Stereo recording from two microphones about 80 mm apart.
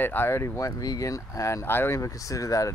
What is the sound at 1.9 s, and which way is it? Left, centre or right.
Speech, left.